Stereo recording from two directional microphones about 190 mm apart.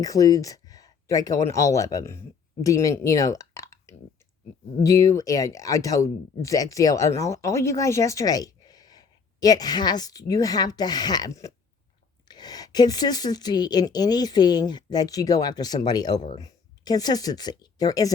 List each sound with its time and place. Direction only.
0.0 s speech: 20° left (ahead or behind)